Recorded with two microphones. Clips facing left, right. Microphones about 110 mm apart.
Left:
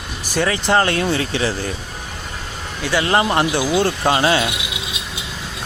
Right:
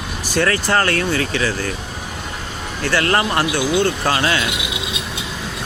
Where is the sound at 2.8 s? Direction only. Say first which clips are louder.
Left 1 dB; 15° left (ahead or behind).